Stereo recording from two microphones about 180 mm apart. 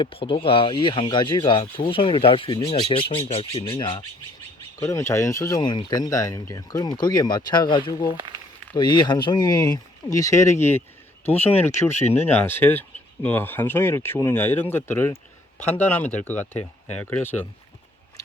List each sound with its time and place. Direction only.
0.0 s speech: 30° left (ahead or behind); by 17.4 s 10° left (ahead or behind)